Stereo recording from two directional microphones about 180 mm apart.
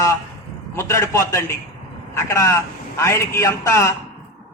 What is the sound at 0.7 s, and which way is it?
A man's voice, 15° left (ahead or behind).